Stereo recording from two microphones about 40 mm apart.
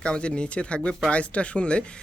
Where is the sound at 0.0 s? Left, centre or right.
Left.